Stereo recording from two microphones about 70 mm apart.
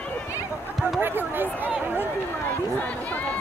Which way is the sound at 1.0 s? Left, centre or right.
Right.